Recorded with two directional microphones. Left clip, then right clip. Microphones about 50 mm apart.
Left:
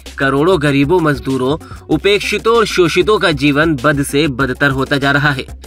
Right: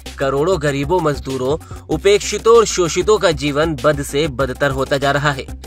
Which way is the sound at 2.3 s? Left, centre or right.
Centre.